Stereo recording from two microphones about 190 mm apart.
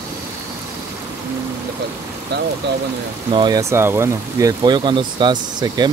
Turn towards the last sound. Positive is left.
turn(degrees=-20)  # may be behind; listen again after turning